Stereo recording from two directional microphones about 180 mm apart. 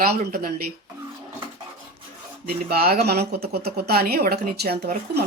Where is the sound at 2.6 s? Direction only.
60° right (ahead or behind).